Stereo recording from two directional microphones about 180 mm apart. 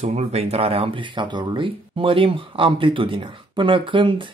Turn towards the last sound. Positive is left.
turn(degrees=-25)  # may be behind; listen again after turning